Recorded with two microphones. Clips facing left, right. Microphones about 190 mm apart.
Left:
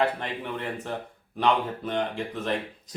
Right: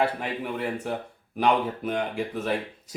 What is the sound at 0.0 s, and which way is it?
Speech, 10° right (ahead or behind).